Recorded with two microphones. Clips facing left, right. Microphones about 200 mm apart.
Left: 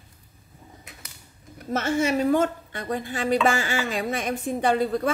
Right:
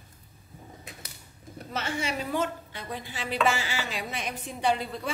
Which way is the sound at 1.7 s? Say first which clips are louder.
Left 9 dB; 50° left (ahead or behind).